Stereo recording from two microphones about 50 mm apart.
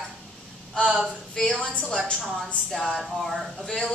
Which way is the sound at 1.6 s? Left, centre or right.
Left.